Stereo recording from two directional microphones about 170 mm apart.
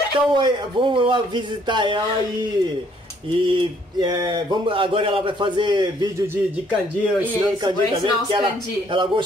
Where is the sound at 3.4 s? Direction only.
30° right (ahead or behind).